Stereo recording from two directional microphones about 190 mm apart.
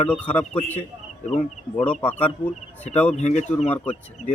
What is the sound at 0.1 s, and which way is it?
Speech, 5° left (ahead or behind).